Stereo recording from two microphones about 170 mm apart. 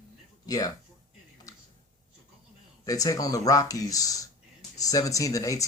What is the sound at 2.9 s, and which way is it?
Speech, 20° left (ahead or behind).